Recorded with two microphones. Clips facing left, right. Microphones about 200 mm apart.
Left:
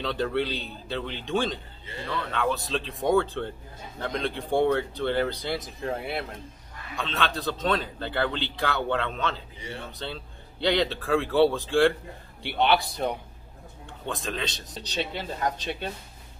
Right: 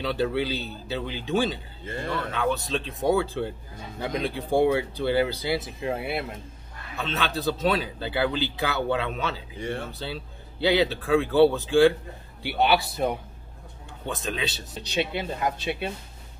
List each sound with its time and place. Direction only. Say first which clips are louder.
0.0 s speech: right 1 dB; 5° right (ahead or behind)
1.9 s speech: right 3 dB; 50° right (ahead or behind)
2.3 s a man's voice: even; centre (ahead or behind)